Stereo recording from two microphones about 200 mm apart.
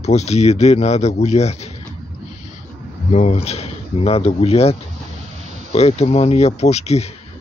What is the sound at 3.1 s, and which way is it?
A man's voice, 35° left (ahead or behind).